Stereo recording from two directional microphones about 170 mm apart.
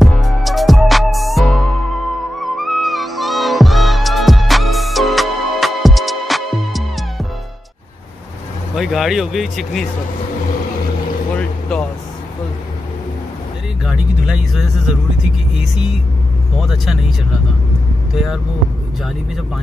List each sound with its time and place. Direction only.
0.0 s music: centre (ahead or behind)
8.7 s speech: centre (ahead or behind)
11.3 s vehicle: 5° left (ahead or behind)
13.8 s speech: 5° right (ahead or behind)
16.5 s speech: centre (ahead or behind)
18.1 s speech: centre (ahead or behind)